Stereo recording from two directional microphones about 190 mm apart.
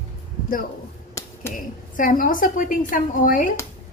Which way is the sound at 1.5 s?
45° left (ahead or behind).